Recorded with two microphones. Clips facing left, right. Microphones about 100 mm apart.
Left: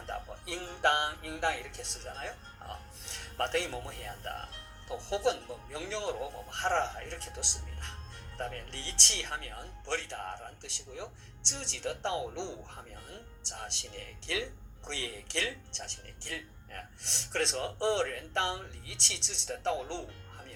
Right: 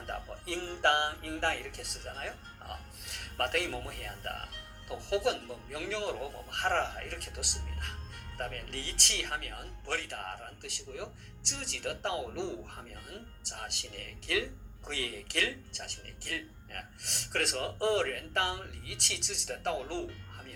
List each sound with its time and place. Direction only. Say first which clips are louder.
0.4 s speech: even; 15° left (ahead or behind)